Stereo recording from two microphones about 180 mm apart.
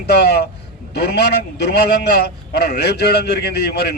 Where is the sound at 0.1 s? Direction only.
65° left (ahead or behind).